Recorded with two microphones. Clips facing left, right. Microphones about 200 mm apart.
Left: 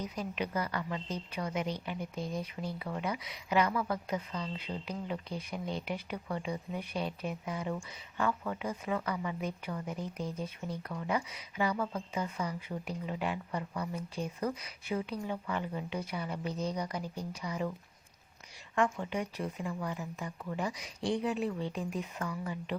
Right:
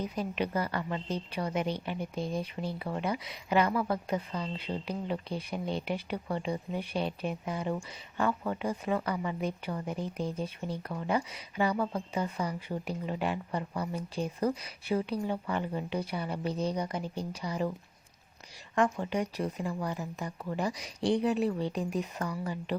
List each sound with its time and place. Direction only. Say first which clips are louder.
0.2 s speech: right 3 dB; 30° right (ahead or behind)
1.5 s a woman's voice: right 3 dB; 60° right (ahead or behind)
1.8 s speech: right 3 dB; 30° right (ahead or behind)
18.7 s speech: right 3 dB; 40° right (ahead or behind)